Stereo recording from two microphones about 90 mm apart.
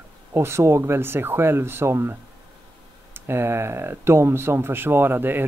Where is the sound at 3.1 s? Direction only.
25° right (ahead or behind).